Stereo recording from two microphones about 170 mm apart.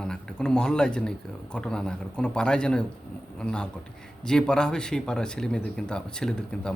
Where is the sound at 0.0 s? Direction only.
5° left (ahead or behind).